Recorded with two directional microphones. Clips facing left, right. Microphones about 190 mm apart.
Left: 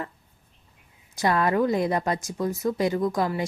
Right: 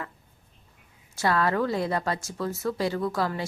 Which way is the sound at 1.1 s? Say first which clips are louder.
Left 2 dB; 15° left (ahead or behind).